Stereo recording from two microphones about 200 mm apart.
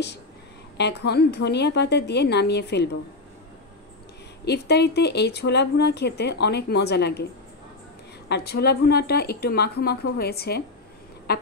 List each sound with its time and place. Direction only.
0.7 s speech: 55° left (ahead or behind)
4.5 s speech: 55° left (ahead or behind)
8.3 s speech: 55° left (ahead or behind)